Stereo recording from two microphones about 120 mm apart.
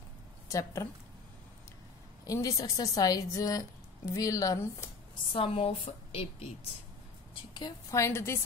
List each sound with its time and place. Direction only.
0.5 s speech: 25° left (ahead or behind)
2.2 s speech: 30° left (ahead or behind)
5.3 s a woman's voice: 50° left (ahead or behind)
7.9 s speech: 25° left (ahead or behind)